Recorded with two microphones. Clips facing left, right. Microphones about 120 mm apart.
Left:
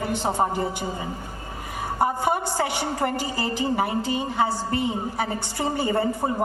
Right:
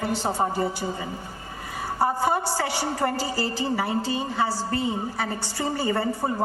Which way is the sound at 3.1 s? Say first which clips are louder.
Even; 20° left (ahead or behind).